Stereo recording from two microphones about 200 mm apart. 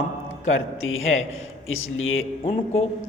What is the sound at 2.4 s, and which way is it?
Speech, 30° left (ahead or behind).